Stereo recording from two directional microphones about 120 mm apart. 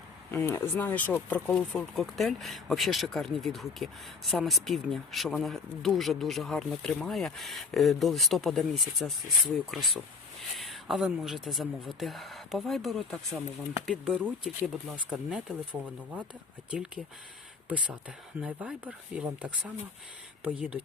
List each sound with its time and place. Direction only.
0.3 s speech: 20° left (ahead or behind); by 9.1 s centre (ahead or behind)
10.5 s speech: centre (ahead or behind)